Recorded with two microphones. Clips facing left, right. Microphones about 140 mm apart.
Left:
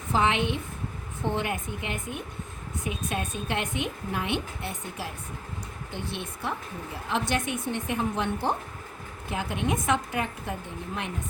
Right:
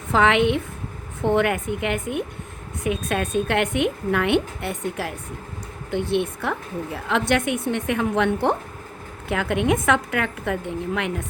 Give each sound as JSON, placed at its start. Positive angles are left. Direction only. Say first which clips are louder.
{"t": 0.1, "sound": "a woman's voice", "louder": "right 7 dB", "side_deg": -70}